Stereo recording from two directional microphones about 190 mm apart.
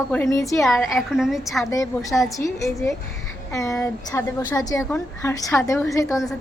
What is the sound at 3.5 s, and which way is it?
A woman's voice, 15° left (ahead or behind).